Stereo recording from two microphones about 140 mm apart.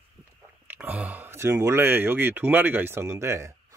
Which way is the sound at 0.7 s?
10° right (ahead or behind).